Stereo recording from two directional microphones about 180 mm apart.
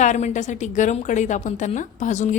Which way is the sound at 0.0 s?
45° left (ahead or behind).